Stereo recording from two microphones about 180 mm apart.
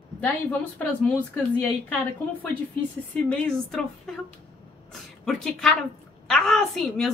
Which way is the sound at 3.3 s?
5° left (ahead or behind).